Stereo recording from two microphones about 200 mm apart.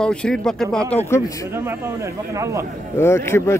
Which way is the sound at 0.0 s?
5° left (ahead or behind).